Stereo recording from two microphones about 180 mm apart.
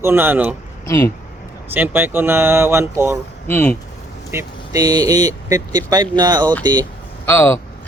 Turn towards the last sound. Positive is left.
turn(degrees=15)  # may be behind; listen again after turning